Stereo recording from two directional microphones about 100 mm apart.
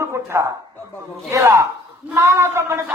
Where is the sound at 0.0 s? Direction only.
30° right (ahead or behind).